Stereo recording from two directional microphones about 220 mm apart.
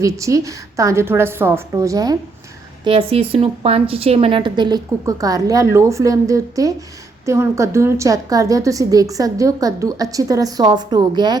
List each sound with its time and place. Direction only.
0.0 s a woman's voice: 15° right (ahead or behind)